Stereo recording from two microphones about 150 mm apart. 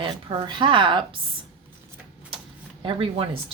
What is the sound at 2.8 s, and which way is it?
Speech, 35° right (ahead or behind).